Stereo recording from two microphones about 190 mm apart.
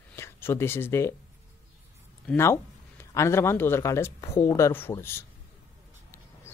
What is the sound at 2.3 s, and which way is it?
Speech, 15° left (ahead or behind).